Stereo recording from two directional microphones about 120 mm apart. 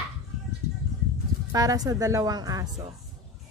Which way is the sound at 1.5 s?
30° right (ahead or behind).